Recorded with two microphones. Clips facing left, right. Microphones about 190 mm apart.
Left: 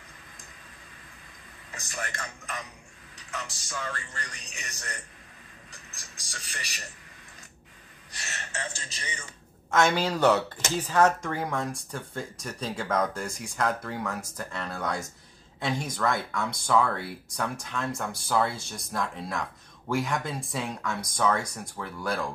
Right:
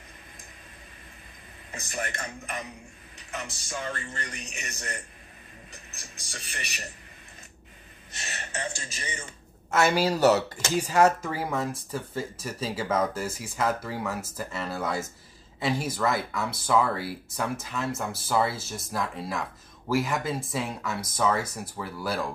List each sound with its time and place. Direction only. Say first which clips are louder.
1.7 s a man's voice: right 3 dB; 20° right (ahead or behind)
3.2 s a sound: right 1 dB; 20° right (ahead or behind)
3.6 s a man's voice: right 4 dB; 20° right (ahead or behind)
5.7 s a sound: right 2 dB; 20° right (ahead or behind)
6.3 s a man's voice: right 2 dB; 20° right (ahead or behind)
8.1 s speech: right 2 dB; 20° right (ahead or behind); by 22.3 s 5° right (ahead or behind)